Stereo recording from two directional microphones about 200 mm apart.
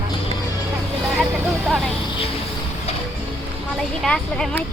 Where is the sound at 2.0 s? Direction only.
25° left (ahead or behind).